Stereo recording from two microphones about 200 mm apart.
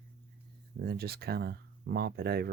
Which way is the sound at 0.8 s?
50° right (ahead or behind).